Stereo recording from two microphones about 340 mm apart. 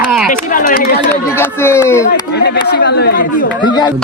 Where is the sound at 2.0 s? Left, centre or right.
Left.